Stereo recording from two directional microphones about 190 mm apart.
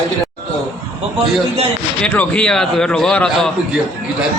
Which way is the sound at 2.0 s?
5° left (ahead or behind).